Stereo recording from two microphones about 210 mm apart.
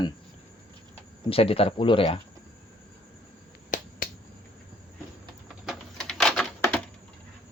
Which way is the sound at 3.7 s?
40° left (ahead or behind).